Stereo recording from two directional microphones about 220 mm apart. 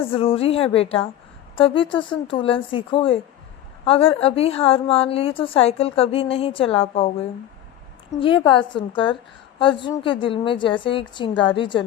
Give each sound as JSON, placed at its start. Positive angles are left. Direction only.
{"t": 0.1, "sound": "a woman's voice", "side_deg": 25}